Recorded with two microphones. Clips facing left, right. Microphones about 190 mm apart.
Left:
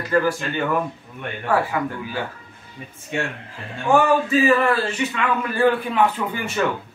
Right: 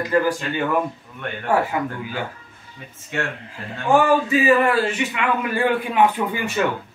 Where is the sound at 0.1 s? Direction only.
15° right (ahead or behind).